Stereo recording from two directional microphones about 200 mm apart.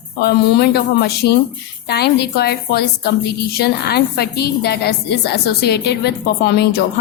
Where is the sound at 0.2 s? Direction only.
55° left (ahead or behind).